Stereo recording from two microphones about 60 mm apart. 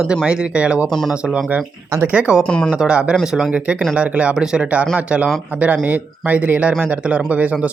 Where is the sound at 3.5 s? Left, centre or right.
Right.